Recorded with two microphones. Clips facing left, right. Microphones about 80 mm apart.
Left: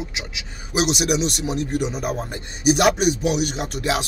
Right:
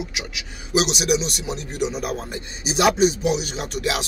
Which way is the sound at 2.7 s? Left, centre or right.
Left.